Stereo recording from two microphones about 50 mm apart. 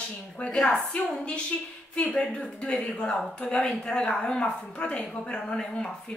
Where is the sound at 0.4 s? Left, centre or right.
Centre.